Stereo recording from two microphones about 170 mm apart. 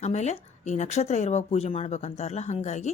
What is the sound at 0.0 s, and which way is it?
A woman's voice, 40° left (ahead or behind).